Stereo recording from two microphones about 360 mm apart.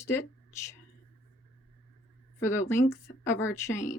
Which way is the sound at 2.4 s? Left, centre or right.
Centre.